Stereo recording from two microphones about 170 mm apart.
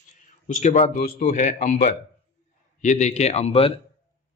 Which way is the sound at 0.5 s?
45° left (ahead or behind).